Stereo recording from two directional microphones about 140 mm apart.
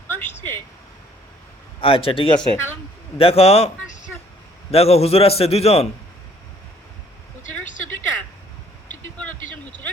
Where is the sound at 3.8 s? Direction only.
65° left (ahead or behind).